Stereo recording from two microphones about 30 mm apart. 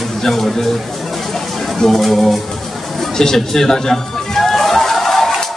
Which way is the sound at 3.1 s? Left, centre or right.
Centre.